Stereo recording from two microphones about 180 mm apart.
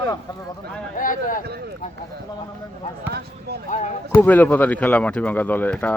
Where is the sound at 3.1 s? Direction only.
65° right (ahead or behind).